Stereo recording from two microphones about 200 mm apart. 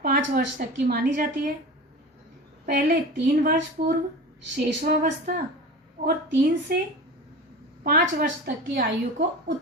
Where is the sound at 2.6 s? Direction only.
45° right (ahead or behind).